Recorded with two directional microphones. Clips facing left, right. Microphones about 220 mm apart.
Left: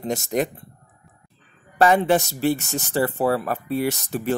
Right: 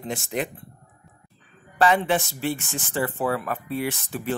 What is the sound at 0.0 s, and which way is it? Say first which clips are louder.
Speech: left 5 dB; 40° left (ahead or behind).